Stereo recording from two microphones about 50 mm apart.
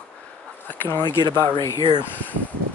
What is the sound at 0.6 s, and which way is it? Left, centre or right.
Speech, left.